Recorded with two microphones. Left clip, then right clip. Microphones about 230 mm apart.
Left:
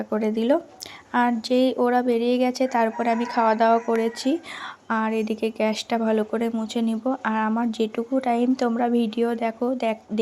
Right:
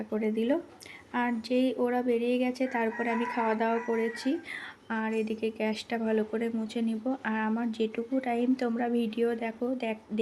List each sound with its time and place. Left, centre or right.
0.1 s speech: centre